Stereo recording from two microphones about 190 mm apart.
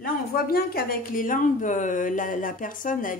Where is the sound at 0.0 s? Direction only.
50° left (ahead or behind).